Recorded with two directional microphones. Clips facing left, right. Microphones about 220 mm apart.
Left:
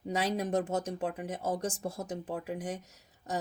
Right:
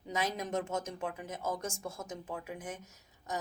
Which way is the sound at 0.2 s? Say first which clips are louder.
Left 4 dB; 35° left (ahead or behind).